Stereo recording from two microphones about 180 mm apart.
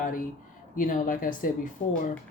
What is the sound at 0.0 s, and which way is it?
Speech, 50° left (ahead or behind).